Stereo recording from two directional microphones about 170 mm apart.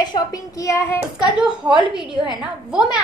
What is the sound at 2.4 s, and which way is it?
Speech, 5° right (ahead or behind).